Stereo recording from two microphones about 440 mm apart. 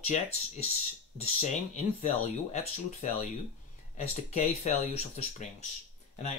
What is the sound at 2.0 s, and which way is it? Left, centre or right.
Speech, centre.